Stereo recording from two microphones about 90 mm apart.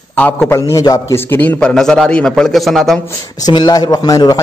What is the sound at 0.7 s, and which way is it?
Speech, 40° left (ahead or behind).